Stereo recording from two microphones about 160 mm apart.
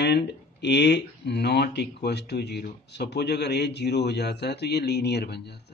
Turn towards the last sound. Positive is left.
turn(degrees=90)